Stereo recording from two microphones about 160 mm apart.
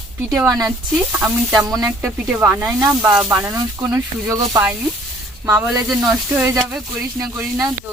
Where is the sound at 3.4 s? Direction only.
20° right (ahead or behind).